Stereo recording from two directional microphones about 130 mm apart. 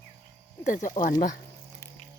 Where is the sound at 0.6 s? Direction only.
80° left.